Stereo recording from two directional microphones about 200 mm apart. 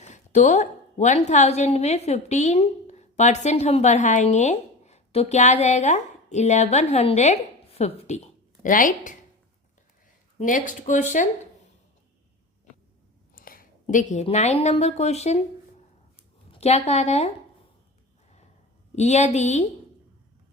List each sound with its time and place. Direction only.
0.0 s a woman's voice: 35° left (ahead or behind)
10.3 s speech: 40° left (ahead or behind)
13.3 s a woman's voice: 45° left (ahead or behind)
16.5 s speech: 30° left (ahead or behind)
18.9 s speech: 35° left (ahead or behind)